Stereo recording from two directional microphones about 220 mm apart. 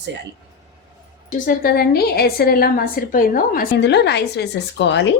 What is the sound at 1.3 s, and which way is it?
A woman's voice, 40° left (ahead or behind).